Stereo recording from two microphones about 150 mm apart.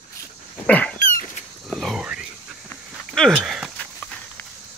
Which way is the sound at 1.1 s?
60° left (ahead or behind).